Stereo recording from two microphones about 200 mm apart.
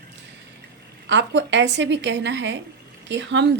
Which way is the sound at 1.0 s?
65° right (ahead or behind).